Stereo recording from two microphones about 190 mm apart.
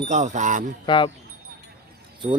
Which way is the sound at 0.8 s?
25° left (ahead or behind).